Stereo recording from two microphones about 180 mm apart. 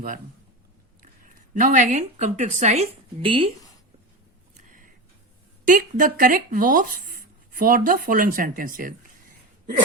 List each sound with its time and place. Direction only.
1.4 s speech: 45° right (ahead or behind); by 3.5 s 30° right (ahead or behind)
5.6 s speech: 50° right (ahead or behind)